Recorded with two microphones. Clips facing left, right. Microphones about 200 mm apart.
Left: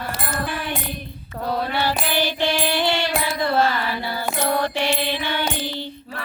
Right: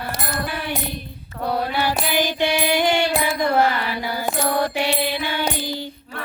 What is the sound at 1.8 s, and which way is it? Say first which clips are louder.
Music: right 1 dB; 15° right (ahead or behind).